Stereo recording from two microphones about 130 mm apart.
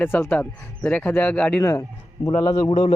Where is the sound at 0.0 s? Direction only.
15° left (ahead or behind).